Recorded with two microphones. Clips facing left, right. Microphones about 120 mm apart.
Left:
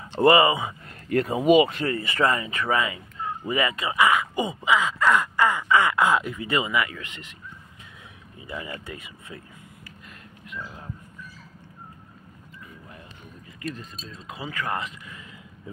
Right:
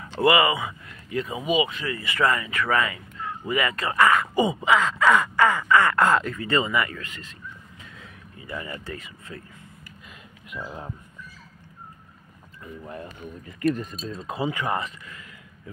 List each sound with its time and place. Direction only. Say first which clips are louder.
0.2 s speech: left 2 dB; 35° left (ahead or behind)
0.5 s speech: left 1 dB; 20° left (ahead or behind)
1.0 s speech: left 7 dB; 55° left (ahead or behind)
1.8 s speech: left 1 dB; 35° left (ahead or behind)
3.7 s speech: right 3 dB; 10° left (ahead or behind)
4.6 s a sound: even; 5° left (ahead or behind)
5.7 s speech: even; 15° left (ahead or behind)
7.0 s speech: right 1 dB; 20° left (ahead or behind)
8.4 s speech: right 1 dB; 20° left (ahead or behind)
12.8 s speech: right 9 dB; 50° right (ahead or behind)
14.0 s speech: right 7 dB; 40° right (ahead or behind)
14.4 s speech: right 5 dB; 20° right (ahead or behind)